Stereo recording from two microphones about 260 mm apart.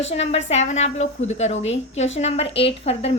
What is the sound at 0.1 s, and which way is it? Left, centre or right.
A woman's voice, left.